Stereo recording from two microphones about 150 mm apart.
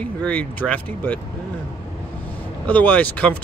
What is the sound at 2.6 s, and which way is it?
Speech, 10° left (ahead or behind).